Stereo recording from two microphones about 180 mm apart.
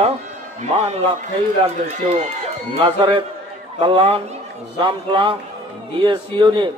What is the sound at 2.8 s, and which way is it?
A man's voice, 30° right (ahead or behind).